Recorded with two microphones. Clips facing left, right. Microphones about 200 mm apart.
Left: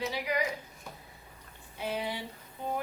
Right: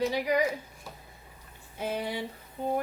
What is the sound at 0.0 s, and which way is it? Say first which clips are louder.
Speech: right 6 dB; 45° right (ahead or behind).